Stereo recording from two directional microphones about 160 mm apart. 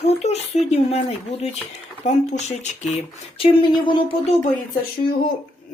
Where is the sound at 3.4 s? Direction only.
30° left (ahead or behind).